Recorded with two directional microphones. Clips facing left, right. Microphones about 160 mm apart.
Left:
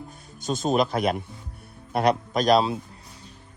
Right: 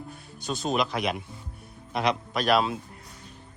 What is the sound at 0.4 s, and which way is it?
A man's voice, 45° left (ahead or behind).